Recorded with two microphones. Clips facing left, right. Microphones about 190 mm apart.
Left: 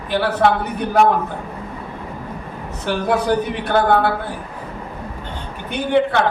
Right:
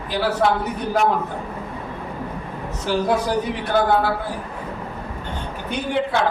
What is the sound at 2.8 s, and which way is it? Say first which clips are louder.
Speech: left 2 dB; 60° left (ahead or behind).